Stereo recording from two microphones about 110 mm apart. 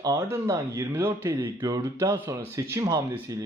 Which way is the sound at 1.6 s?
35° right (ahead or behind).